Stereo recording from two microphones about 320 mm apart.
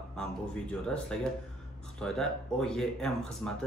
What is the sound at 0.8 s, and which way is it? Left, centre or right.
Speech, centre.